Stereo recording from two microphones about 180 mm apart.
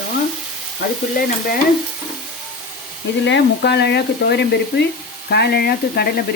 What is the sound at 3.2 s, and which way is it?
Speech, 75° left (ahead or behind).